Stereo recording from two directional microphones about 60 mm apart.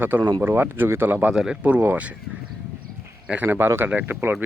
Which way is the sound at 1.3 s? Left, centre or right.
Centre.